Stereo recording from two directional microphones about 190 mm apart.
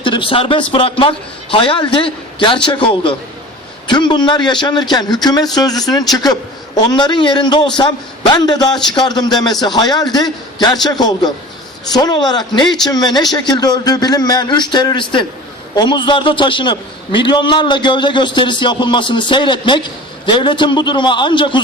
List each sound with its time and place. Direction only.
0.0 s a man's voice: 25° left (ahead or behind)